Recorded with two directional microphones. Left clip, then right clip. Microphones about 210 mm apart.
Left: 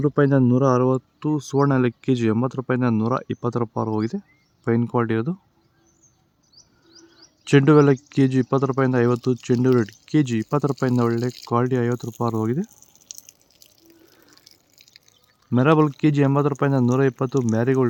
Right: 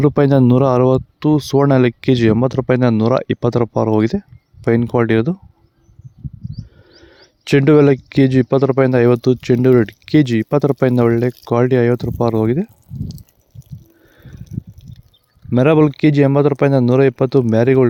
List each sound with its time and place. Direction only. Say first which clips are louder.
0.0 s speech: right 6 dB; 30° right (ahead or behind)
6.6 s speech: right 7 dB; 30° right (ahead or behind)
15.4 s speech: right 6 dB; 25° right (ahead or behind)